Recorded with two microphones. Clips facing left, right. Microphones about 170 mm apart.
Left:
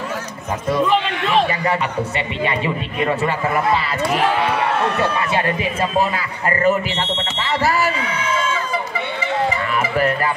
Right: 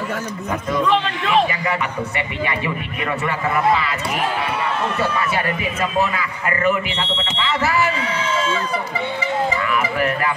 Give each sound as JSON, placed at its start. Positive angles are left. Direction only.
{"t": 0.8, "sound": "a man's voice", "side_deg": 0}
{"t": 1.5, "sound": "a man's voice", "side_deg": 35}
{"t": 5.3, "sound": "speech", "side_deg": 30}
{"t": 8.0, "sound": "a sound", "side_deg": -30}